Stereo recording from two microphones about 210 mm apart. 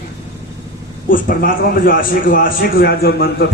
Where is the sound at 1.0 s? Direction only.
40° left (ahead or behind).